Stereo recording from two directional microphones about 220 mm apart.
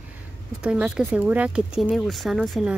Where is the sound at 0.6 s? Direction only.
5° right (ahead or behind).